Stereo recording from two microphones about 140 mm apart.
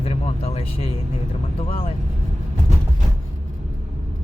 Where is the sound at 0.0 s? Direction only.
50° left (ahead or behind).